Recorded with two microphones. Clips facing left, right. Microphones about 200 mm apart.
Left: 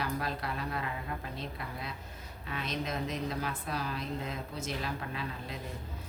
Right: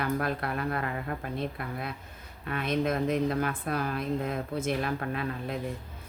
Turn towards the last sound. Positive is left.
turn(degrees=-55)  # may be behind; listen again after turning